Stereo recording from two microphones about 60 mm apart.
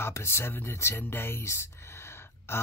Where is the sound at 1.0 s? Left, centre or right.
Left.